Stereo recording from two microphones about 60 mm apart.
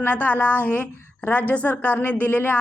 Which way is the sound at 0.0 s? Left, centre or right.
Left.